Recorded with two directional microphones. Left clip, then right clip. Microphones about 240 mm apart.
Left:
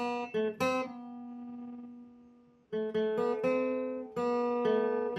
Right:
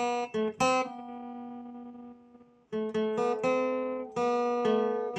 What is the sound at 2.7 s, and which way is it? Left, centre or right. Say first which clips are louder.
Guitar: right 1 dB; right.